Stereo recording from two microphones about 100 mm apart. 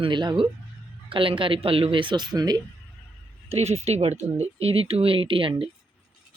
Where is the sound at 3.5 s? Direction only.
90° right; by 5.7 s 60° right (ahead or behind).